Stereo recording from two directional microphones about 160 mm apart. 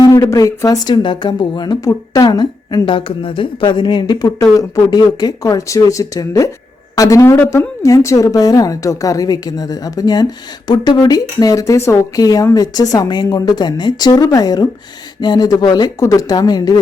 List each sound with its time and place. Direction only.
0.0 s speech: 20° left (ahead or behind)